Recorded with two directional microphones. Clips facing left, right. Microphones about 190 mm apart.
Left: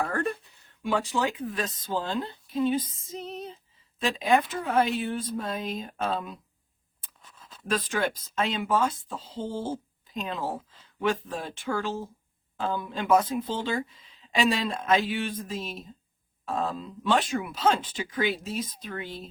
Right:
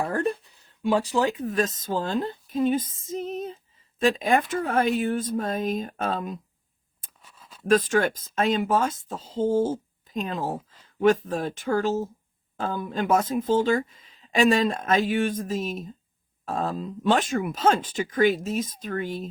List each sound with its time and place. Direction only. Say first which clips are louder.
0.9 s speech: right 4 dB; 35° right (ahead or behind)
7.2 s a sound: even; 10° right (ahead or behind)
7.7 s speech: right 7 dB; 45° right (ahead or behind)